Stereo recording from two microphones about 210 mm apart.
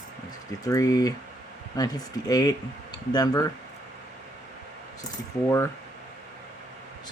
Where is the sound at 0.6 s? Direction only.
15° left (ahead or behind).